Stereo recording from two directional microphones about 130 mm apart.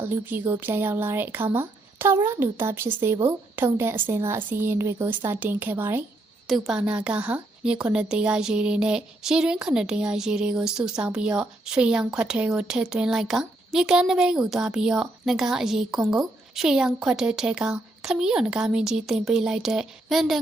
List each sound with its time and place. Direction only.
0.0 s speech: 15° right (ahead or behind)
6.5 s a woman's voice: 5° right (ahead or behind)